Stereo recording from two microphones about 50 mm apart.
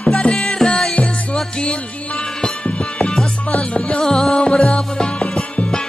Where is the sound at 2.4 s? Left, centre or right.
Centre.